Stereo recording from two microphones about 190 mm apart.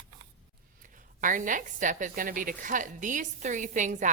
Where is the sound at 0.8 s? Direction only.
45° right (ahead or behind).